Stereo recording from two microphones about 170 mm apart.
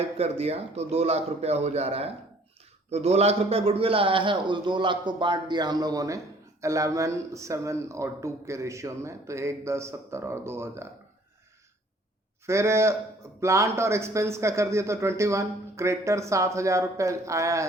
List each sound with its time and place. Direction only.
0.0 s a man's voice: 35° right (ahead or behind); by 10.8 s 15° right (ahead or behind)
12.5 s speech: 15° right (ahead or behind)